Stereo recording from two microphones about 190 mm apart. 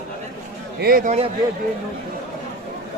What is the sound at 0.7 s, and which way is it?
Speech, 50° right (ahead or behind).